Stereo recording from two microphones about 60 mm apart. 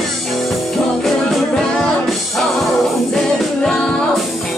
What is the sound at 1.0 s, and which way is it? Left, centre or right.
Music, centre.